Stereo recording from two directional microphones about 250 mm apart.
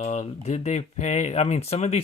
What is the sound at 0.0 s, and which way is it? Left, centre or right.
Speech, left.